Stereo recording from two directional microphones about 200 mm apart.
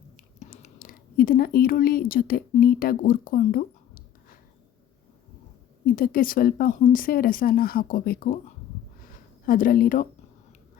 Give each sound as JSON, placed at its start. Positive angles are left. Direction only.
{"t": 0.3, "sound": "speech", "side_deg": 40}
{"t": 5.8, "sound": "speech", "side_deg": 45}
{"t": 9.5, "sound": "speech", "side_deg": 45}